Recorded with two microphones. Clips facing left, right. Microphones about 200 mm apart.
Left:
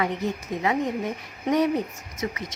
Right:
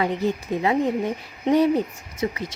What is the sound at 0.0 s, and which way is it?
Speech, 30° right (ahead or behind).